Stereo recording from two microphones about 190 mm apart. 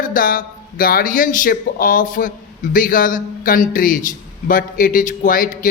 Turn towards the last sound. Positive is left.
turn(degrees=45)  # may be behind; listen again after turning